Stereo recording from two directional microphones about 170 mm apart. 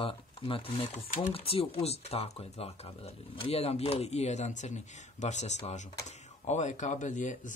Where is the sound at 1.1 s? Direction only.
50° left (ahead or behind).